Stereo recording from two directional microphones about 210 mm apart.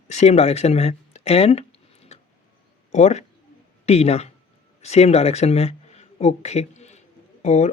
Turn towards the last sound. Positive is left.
turn(degrees=35)  # may be behind; listen again after turning